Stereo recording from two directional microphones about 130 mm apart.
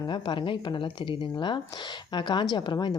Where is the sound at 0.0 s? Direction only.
40° left (ahead or behind).